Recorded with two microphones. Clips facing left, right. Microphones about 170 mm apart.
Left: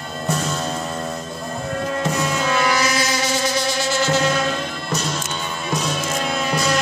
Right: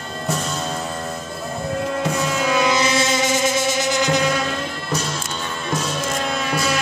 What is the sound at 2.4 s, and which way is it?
Music, 15° right (ahead or behind).